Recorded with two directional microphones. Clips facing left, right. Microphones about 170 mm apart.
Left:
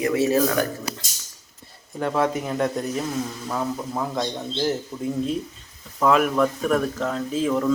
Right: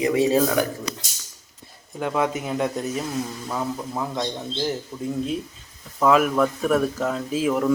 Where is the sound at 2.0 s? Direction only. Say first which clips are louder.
Left 1 dB; 5° right (ahead or behind).